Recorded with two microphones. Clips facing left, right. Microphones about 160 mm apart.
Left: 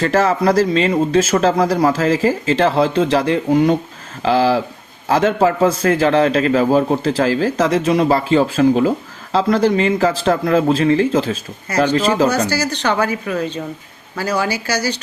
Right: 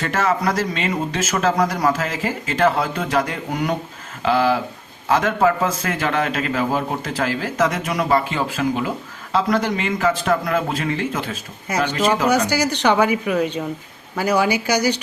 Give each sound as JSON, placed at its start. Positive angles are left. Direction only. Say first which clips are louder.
{"t": 0.0, "sound": "a man's voice", "louder": "left 5 dB", "side_deg": 35}
{"t": 12.5, "sound": "a woman's voice", "louder": "right 1 dB", "side_deg": -15}